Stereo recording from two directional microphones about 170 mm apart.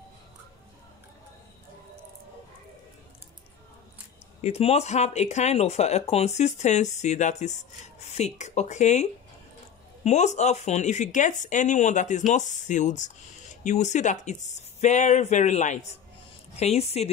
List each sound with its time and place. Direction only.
4.4 s speech: 40° left (ahead or behind)
10.0 s speech: 40° left (ahead or behind)